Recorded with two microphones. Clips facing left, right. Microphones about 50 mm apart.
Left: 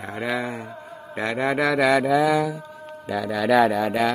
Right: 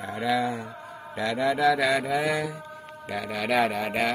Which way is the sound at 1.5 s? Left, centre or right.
Left.